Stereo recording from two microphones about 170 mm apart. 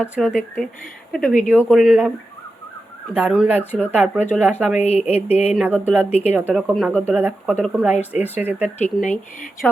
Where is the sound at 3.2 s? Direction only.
5° right (ahead or behind).